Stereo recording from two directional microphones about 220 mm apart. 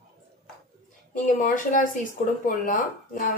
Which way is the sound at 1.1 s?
40° left (ahead or behind).